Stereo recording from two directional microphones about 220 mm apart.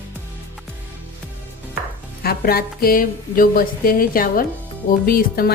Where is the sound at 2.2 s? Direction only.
45° left (ahead or behind).